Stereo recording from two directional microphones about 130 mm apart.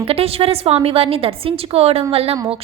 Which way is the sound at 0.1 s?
50° right (ahead or behind).